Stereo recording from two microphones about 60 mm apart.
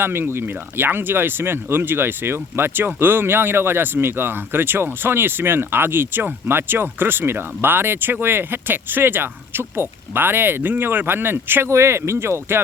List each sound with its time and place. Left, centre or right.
0.0 s speech: right
11.7 s speech: right